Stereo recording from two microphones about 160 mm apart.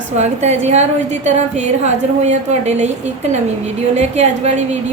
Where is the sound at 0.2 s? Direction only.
45° right (ahead or behind).